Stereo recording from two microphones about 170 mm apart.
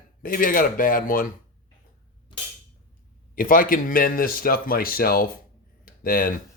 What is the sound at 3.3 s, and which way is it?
Speech, 55° left (ahead or behind).